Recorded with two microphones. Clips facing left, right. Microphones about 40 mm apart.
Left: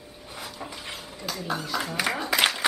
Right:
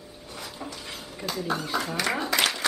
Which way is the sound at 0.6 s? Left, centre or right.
Centre.